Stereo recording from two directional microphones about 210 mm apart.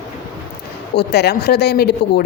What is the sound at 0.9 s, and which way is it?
Speech, 50° left (ahead or behind).